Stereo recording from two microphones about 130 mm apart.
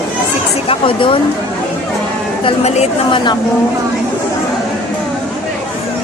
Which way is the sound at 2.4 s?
50° left (ahead or behind).